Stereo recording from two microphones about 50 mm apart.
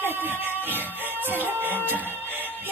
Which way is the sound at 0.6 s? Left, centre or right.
Right.